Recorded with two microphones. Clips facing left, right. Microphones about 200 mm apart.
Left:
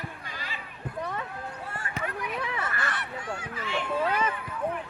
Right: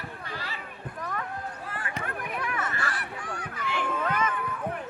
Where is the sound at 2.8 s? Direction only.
25° left (ahead or behind).